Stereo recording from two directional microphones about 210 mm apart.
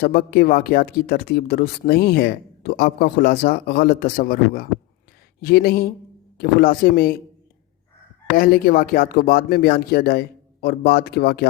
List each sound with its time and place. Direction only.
0.0 s speech: 45° left (ahead or behind)
8.4 s speech: 45° left (ahead or behind)